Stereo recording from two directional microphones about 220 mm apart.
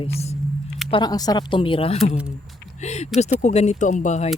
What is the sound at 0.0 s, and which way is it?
Speech, 30° left (ahead or behind).